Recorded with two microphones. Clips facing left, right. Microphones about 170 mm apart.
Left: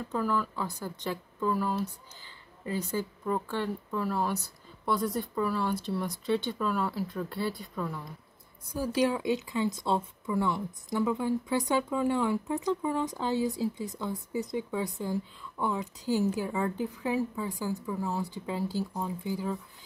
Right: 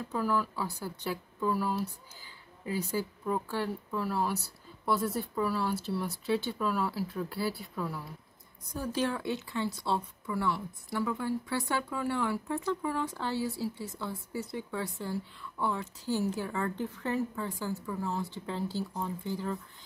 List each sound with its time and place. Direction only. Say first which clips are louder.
0.1 s speech: left 1 dB; 5° right (ahead or behind)
2.2 s a sound: left 1 dB; 10° right (ahead or behind)
2.9 s speech: left 2 dB; 5° right (ahead or behind)
8.7 s speech: left 4 dB; 10° left (ahead or behind)